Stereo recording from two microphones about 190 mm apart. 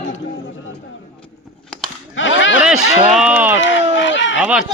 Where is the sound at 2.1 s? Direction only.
80° left.